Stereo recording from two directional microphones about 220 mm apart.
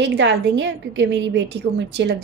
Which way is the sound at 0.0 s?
55° right (ahead or behind).